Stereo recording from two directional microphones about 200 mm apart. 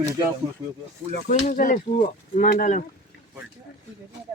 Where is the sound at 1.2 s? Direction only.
40° left (ahead or behind).